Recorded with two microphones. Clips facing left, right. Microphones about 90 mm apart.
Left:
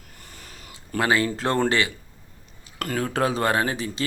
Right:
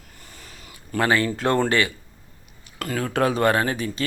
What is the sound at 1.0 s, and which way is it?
Speech, 25° left (ahead or behind).